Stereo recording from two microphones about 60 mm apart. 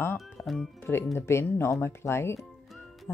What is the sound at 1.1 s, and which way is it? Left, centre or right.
Speech, left.